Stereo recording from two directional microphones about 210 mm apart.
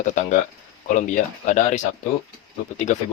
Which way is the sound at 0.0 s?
35° left (ahead or behind).